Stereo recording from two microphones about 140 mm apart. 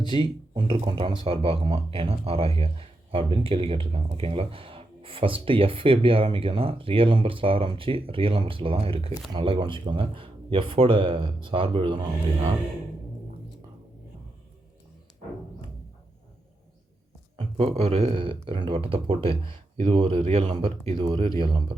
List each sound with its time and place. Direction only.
0.1 s speech: 35° right (ahead or behind)
17.3 s speech: 45° right (ahead or behind)